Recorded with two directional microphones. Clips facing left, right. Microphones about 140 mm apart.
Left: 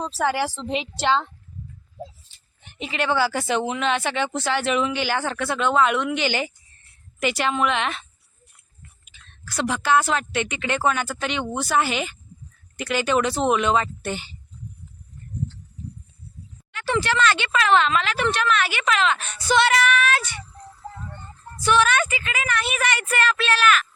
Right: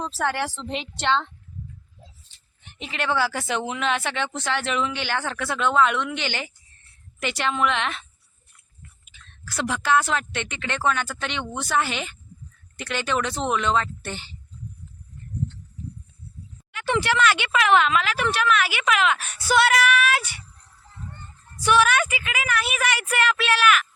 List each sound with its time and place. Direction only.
0.0 s speech: centre (ahead or behind)
2.7 s speech: 5° left (ahead or behind)
9.0 s speech: centre (ahead or behind)
16.7 s speech: 15° right (ahead or behind)
21.0 s music: 90° left
21.6 s speech: 10° right (ahead or behind)